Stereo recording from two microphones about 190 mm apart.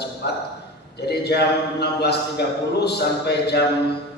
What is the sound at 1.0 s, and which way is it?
A man's voice, 60° left (ahead or behind).